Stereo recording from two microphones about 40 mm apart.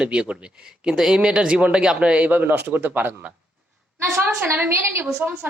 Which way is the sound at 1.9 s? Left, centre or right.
Right.